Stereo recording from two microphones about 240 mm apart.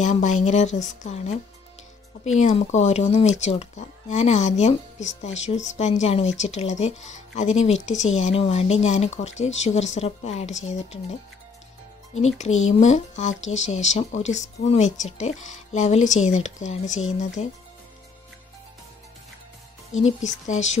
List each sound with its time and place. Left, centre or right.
0.0 s speech: left
12.4 s speech: left
20.4 s speech: left